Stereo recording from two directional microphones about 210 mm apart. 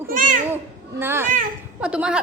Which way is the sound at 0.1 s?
40° right (ahead or behind).